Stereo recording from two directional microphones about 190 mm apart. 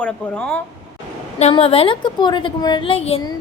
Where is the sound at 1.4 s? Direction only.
35° left (ahead or behind).